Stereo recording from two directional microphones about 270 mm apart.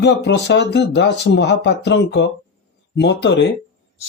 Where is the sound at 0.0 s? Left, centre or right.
Left.